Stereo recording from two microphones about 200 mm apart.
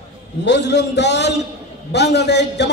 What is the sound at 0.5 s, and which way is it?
A man's voice, 60° left (ahead or behind).